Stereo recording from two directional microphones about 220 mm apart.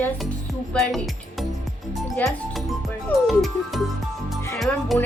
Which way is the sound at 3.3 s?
Centre (ahead or behind).